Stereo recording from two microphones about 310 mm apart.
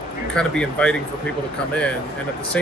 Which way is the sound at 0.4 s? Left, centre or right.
Centre.